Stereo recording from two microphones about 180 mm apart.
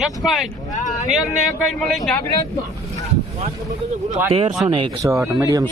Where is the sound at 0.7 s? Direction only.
45° left (ahead or behind).